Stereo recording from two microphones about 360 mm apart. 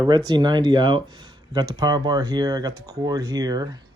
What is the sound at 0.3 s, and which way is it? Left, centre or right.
Speech, centre.